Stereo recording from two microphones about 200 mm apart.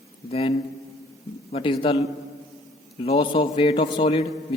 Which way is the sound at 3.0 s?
25° left (ahead or behind).